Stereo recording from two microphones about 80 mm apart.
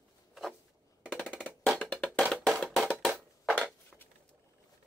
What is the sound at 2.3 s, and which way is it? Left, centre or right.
Music, centre.